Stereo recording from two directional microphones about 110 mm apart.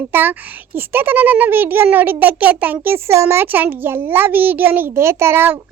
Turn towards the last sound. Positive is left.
turn(degrees=-20)  # may be behind; listen again after turning